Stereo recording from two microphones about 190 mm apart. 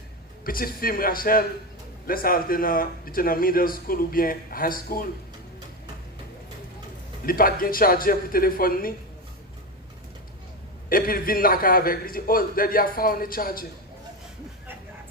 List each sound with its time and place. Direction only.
0.4 s speech: 50° left (ahead or behind)
7.3 s speech: 50° left (ahead or behind)
10.8 s speech: 50° left (ahead or behind)